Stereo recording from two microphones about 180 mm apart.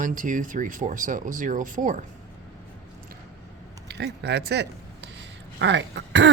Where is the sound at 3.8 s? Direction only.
70° right (ahead or behind).